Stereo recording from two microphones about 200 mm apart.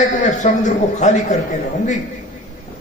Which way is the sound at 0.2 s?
35° left (ahead or behind).